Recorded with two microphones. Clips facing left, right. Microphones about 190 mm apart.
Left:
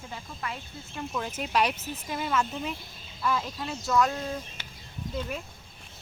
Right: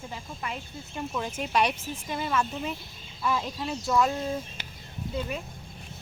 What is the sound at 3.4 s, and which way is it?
Speech, 15° right (ahead or behind).